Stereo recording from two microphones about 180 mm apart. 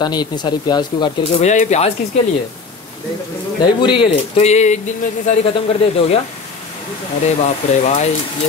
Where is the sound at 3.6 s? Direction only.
25° left (ahead or behind).